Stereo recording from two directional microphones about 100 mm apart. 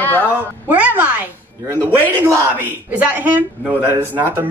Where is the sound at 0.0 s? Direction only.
20° left (ahead or behind).